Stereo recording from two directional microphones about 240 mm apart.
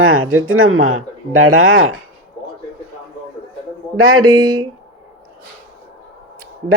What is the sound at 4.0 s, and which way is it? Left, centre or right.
Speech, right.